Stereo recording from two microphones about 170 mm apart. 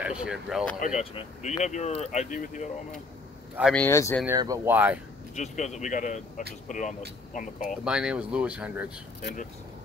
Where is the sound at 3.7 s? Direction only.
10° left (ahead or behind).